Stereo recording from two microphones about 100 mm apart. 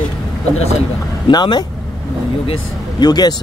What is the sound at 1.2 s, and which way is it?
Speech, 50° left (ahead or behind).